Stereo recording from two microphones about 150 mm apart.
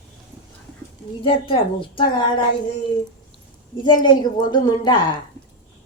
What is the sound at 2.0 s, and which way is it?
Speech, 35° left (ahead or behind).